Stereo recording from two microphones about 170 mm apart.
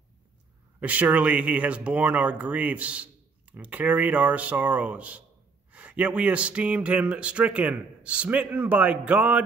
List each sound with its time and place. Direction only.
0.7 s speech: 10° right (ahead or behind)